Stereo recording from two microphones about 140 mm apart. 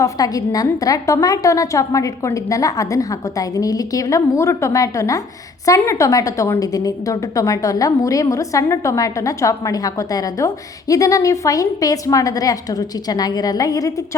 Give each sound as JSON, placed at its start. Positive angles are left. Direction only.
{"t": 0.0, "sound": "a woman's voice", "side_deg": 25}